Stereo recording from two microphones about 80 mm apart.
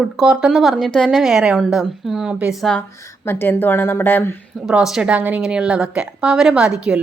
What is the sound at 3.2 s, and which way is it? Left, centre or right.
A woman's voice, left.